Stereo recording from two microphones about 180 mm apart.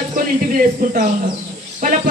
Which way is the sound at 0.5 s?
50° right (ahead or behind).